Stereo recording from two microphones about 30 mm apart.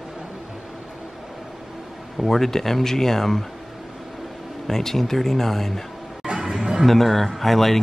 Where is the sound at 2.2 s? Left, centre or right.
Centre.